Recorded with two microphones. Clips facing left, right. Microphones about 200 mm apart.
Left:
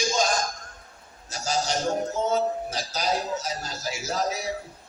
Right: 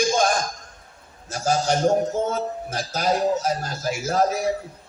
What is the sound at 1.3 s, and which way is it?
A man's voice, 55° right (ahead or behind).